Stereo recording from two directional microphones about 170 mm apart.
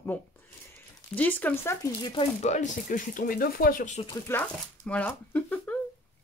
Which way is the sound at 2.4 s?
45° left (ahead or behind).